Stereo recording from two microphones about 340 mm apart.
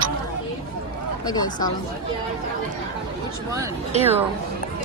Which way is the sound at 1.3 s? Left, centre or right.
Centre.